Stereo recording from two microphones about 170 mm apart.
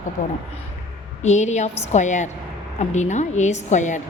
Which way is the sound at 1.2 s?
40° left (ahead or behind).